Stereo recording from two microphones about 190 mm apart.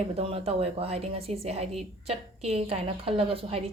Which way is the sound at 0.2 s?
30° right (ahead or behind).